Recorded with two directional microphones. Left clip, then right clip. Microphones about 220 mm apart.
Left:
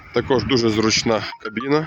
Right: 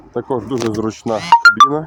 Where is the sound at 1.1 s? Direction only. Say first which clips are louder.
Even; 15° left (ahead or behind).